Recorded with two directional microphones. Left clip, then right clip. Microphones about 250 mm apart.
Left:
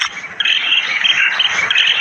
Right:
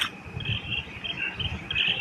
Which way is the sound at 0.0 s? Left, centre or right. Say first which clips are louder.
Left 14 dB; left.